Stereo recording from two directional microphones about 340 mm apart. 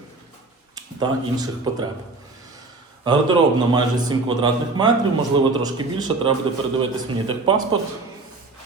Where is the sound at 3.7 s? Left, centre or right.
Centre.